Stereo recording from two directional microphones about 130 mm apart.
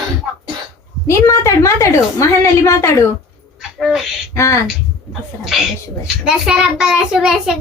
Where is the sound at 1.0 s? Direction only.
20° left (ahead or behind).